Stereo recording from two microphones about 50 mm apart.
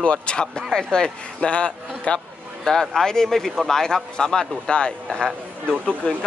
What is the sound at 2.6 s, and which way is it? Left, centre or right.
Speech, centre.